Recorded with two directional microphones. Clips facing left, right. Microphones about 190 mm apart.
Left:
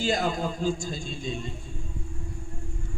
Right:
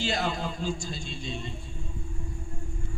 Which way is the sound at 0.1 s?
50° left (ahead or behind).